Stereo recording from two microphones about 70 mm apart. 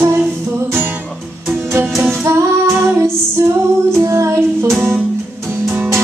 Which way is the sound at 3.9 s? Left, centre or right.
Right.